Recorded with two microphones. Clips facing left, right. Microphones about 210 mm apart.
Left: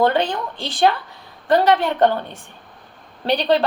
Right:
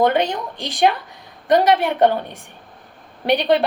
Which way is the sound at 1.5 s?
15° right (ahead or behind).